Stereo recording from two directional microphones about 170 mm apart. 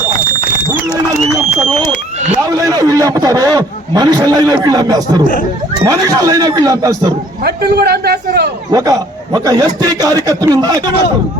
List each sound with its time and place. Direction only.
2.3 s a man's voice: 20° right (ahead or behind)
7.4 s a man's voice: 70° right (ahead or behind)
8.7 s a man's voice: 20° right (ahead or behind)